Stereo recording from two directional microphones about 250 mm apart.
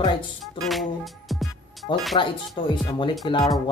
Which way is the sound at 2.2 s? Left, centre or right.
Centre.